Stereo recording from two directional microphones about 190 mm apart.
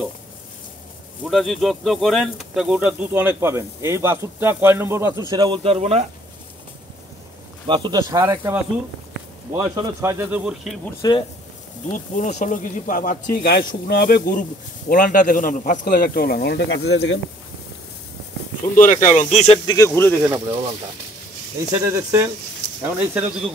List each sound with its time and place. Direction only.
1.2 s speech: centre (ahead or behind)
5.3 s speech: 25° right (ahead or behind)
7.6 s speech: 25° right (ahead or behind); by 10.8 s 5° right (ahead or behind)
11.0 s speech: 20° left (ahead or behind)
11.9 s speech: 40° left (ahead or behind); by 17.2 s 75° left (ahead or behind)
18.8 s speech: 40° left (ahead or behind)
19.6 s speech: 20° left (ahead or behind)
21.8 s speech: 15° right (ahead or behind)